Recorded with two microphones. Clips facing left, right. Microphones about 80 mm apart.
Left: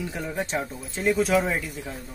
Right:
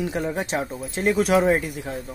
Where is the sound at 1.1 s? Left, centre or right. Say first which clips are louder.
Right 3 dB; right.